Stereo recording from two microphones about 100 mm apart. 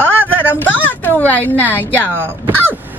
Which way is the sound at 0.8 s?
15° left (ahead or behind).